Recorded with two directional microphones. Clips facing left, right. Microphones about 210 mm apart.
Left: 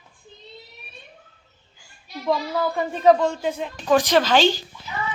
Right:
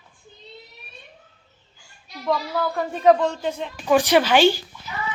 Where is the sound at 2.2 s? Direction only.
Centre (ahead or behind).